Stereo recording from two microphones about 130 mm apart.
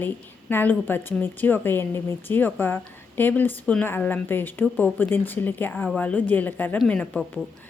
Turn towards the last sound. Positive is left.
turn(degrees=5)  # may be behind; listen again after turning